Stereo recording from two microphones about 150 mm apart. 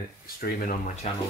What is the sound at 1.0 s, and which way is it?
Speech, 45° left (ahead or behind).